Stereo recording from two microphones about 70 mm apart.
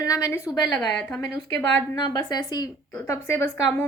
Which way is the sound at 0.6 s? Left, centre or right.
Left.